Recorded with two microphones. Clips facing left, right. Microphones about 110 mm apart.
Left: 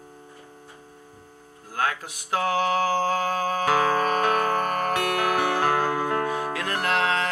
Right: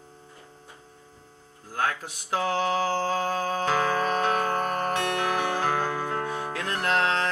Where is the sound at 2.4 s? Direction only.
50° left (ahead or behind).